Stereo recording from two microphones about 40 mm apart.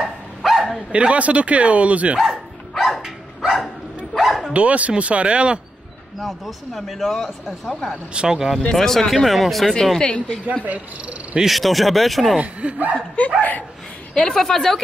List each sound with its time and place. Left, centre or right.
0.5 s dog: centre
0.9 s speech: right
2.1 s dog: centre
4.6 s speech: right
6.2 s speech: centre
8.1 s speech: right
8.7 s speech: centre
9.9 s a woman's voice: left
10.6 s speech: right
11.4 s speech: centre
12.4 s speech: right
12.9 s a woman's voice: left
13.4 s speech: left
14.3 s speech: centre